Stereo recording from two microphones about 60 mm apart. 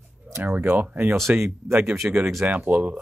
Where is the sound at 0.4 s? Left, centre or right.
Right.